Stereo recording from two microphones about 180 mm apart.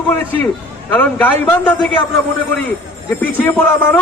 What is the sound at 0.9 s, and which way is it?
Speech, 10° left (ahead or behind).